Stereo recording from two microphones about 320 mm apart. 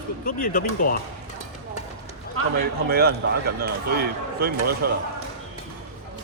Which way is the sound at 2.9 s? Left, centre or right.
Right.